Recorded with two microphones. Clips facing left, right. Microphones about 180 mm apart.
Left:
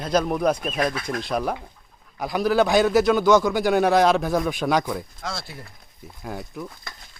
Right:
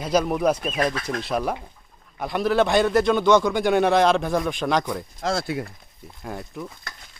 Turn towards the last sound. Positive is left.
turn(degrees=0)  # may be behind; listen again after turning